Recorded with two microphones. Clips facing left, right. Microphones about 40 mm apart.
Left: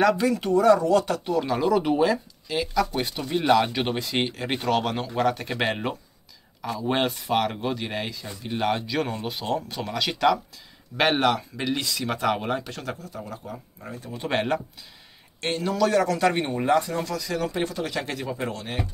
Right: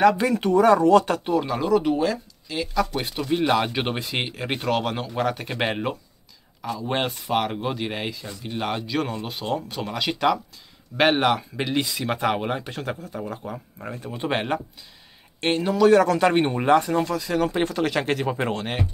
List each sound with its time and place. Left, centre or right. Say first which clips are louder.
0.4 s speech: right 2 dB; right
1.3 s speech: right 1 dB; centre
3.0 s speech: right 2 dB; centre
3.7 s speech: even; right
12.6 s speech: right 3 dB; right
15.4 s speech: right 5 dB; right
16.9 s speech: right 5 dB; right
17.6 s speech: right 6 dB; right